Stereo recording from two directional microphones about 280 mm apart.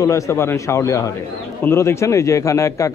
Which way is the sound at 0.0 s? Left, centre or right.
Centre.